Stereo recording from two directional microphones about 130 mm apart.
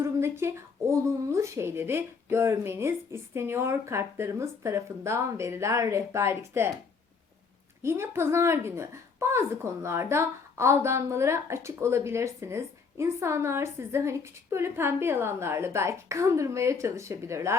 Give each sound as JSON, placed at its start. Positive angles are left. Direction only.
{"t": 0.0, "sound": "a sound", "side_deg": -20}
{"t": 1.0, "sound": "a woman's voice", "side_deg": -20}
{"t": 7.8, "sound": "a woman's voice", "side_deg": -20}